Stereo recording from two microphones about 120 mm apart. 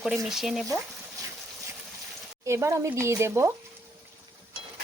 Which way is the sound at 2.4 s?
25° right (ahead or behind).